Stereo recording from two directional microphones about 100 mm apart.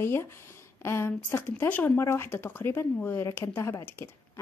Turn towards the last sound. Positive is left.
turn(degrees=20)  # may be behind; listen again after turning